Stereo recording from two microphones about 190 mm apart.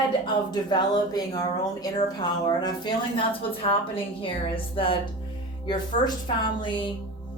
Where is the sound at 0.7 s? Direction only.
20° left (ahead or behind).